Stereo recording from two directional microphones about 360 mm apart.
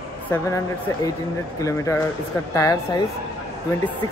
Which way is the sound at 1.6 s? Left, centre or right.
Centre.